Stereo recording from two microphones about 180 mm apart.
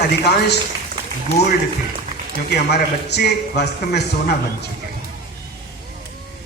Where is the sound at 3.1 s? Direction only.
65° left (ahead or behind).